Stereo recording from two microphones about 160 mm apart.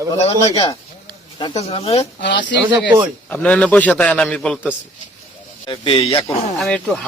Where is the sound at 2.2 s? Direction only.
90° left.